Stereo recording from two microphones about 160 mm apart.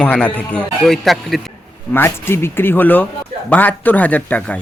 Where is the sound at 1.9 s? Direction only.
15° left (ahead or behind).